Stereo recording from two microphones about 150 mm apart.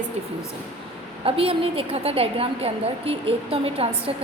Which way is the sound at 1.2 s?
40° right (ahead or behind).